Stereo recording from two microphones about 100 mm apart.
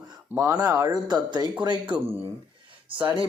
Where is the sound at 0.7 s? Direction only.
35° right (ahead or behind).